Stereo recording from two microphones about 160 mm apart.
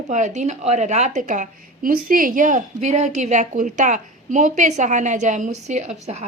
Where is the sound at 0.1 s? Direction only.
50° right (ahead or behind).